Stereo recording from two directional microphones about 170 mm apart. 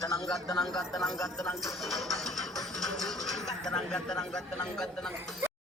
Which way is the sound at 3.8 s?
5° left (ahead or behind).